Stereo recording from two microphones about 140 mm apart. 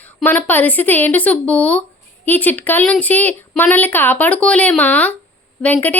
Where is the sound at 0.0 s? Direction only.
10° left (ahead or behind).